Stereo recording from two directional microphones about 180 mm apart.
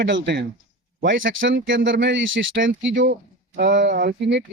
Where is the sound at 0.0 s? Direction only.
80° right.